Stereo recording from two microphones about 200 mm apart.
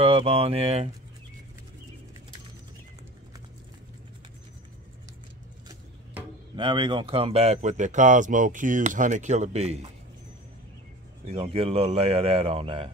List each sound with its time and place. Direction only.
0.0 s speech: 30° right (ahead or behind)
6.5 s speech: 25° right (ahead or behind)
11.2 s speech: 30° right (ahead or behind)